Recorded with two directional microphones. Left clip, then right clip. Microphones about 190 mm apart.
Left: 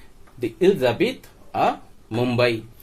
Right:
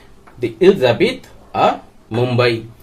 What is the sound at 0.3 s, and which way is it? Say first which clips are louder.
Speech: right 7 dB; 40° left (ahead or behind).